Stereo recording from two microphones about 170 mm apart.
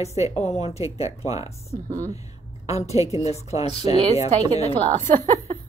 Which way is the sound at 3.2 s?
40° left (ahead or behind).